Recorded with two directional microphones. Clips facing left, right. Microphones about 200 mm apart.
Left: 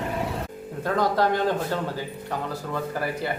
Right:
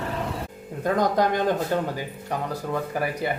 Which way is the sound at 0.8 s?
15° right (ahead or behind).